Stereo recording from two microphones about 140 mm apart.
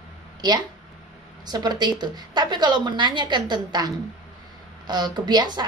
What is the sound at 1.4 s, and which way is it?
Speech, 30° right (ahead or behind).